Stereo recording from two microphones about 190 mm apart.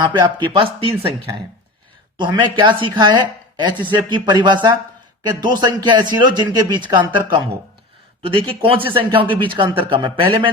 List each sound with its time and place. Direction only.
0.0 s speech: 25° right (ahead or behind)